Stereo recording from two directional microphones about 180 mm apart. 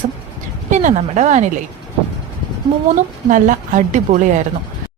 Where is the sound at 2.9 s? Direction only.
45° right (ahead or behind).